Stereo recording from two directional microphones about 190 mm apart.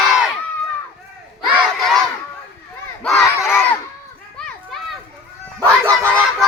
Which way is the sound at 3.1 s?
15° left (ahead or behind).